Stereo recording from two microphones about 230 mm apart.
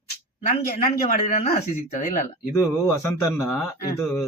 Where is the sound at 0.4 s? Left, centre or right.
Left.